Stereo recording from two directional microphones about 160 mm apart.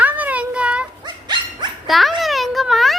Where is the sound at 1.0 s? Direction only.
30° right (ahead or behind).